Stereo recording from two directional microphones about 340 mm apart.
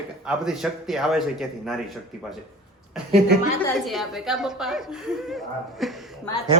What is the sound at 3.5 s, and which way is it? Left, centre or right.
Speech, centre.